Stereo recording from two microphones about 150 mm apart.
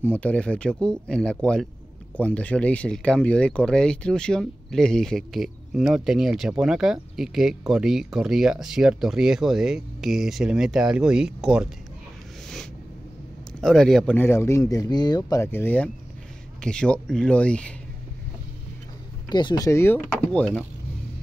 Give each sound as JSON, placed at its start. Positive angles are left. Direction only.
{"t": 0.0, "sound": "speech", "side_deg": 10}
{"t": 13.6, "sound": "speech", "side_deg": 0}
{"t": 14.1, "sound": "speech", "side_deg": 15}
{"t": 19.2, "sound": "speech", "side_deg": 30}
{"t": 20.3, "sound": "speech", "side_deg": 5}